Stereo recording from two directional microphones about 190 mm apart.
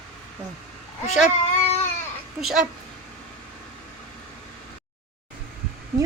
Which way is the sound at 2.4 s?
Centre (ahead or behind).